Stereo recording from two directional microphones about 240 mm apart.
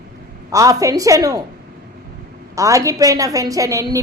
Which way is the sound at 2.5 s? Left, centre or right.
Centre.